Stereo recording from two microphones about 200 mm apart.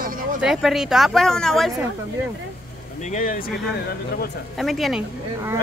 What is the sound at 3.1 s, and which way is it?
Speech, 45° left (ahead or behind).